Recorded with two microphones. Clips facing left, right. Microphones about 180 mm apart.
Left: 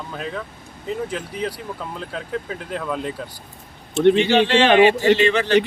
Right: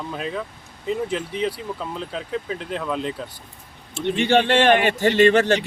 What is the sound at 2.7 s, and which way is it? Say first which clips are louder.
Speech: left 1 dB; centre (ahead or behind).